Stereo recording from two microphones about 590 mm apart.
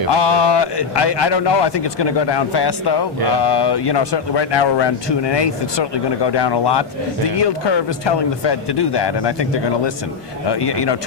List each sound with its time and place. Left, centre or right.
0.1 s speech: left